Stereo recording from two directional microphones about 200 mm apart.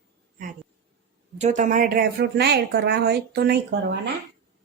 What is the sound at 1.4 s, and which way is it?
A woman's voice, 40° right (ahead or behind).